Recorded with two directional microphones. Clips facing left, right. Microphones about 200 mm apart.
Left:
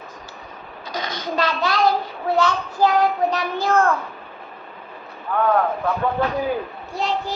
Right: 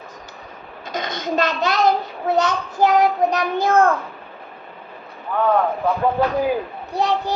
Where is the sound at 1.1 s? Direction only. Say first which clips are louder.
Right 3 dB; 20° right (ahead or behind).